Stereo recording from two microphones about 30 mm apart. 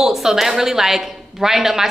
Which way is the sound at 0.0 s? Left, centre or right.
Centre.